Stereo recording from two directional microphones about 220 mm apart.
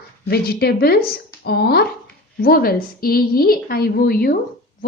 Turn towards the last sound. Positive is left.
turn(degrees=45)  # may be behind; listen again after turning